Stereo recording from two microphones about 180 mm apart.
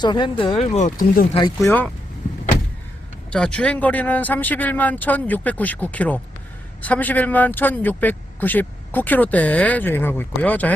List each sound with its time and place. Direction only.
0.0 s speech: 25° left (ahead or behind); by 1.2 s 45° left (ahead or behind)
1.3 s speech: 25° left (ahead or behind)
1.6 s speech: 10° left (ahead or behind)
3.2 s speech: 5° left (ahead or behind)